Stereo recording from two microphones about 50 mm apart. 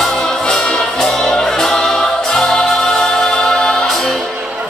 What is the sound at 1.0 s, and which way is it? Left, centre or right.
Music, centre.